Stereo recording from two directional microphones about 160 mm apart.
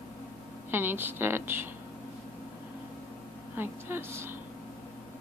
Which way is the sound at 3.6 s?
15° right (ahead or behind).